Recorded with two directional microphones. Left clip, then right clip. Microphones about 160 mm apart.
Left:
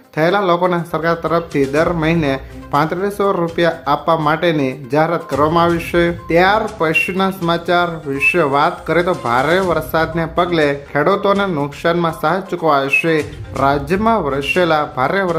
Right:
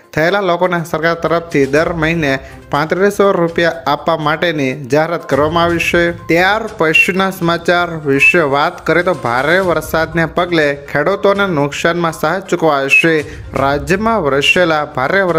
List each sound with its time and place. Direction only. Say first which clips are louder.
0.2 s speech: right 1 dB; 25° right (ahead or behind)